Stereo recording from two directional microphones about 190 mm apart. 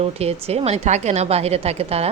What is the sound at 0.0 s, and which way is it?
A woman's voice, 30° right (ahead or behind).